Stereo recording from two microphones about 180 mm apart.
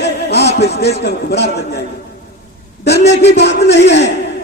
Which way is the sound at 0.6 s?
70° left (ahead or behind).